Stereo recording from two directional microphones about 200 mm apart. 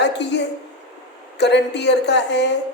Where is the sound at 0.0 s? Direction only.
60° left (ahead or behind).